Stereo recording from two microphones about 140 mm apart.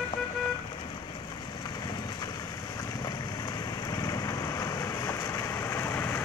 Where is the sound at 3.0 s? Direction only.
30° left (ahead or behind).